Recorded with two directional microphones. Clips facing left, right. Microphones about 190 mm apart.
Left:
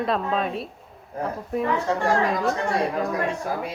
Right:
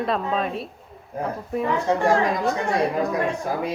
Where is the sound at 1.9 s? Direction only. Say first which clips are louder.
Right 3 dB; 20° right (ahead or behind).